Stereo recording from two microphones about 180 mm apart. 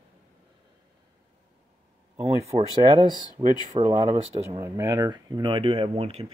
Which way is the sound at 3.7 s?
25° right (ahead or behind).